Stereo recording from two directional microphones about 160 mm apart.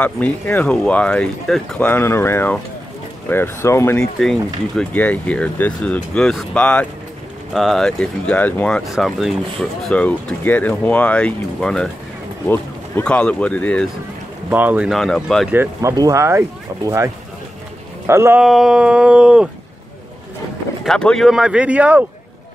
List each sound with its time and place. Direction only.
0.0 s speech: 10° left (ahead or behind)
14.5 s speech: 10° right (ahead or behind)
14.9 s speech: centre (ahead or behind)
15.5 s speech: 15° right (ahead or behind)
18.4 s speech: centre (ahead or behind)
20.8 s speech: 5° left (ahead or behind)